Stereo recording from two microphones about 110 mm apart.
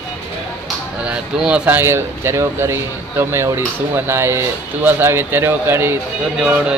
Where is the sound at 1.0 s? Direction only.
10° right (ahead or behind).